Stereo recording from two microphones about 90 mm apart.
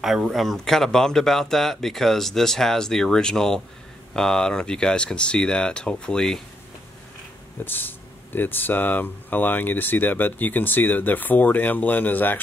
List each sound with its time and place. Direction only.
0.0 s a man's voice: 5° right (ahead or behind)
7.6 s speech: 20° left (ahead or behind)